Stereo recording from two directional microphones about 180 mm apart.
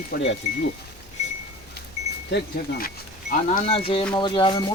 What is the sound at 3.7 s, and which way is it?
Speech, 30° left (ahead or behind).